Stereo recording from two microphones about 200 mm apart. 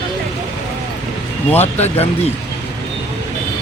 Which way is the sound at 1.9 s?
30° left (ahead or behind).